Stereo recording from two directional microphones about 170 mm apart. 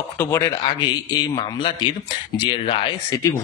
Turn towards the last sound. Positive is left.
turn(degrees=20)  # may be behind; listen again after turning